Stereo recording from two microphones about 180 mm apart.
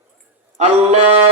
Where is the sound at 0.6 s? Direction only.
35° right (ahead or behind).